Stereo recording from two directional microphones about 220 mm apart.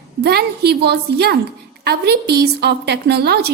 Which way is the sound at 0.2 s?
45° right (ahead or behind).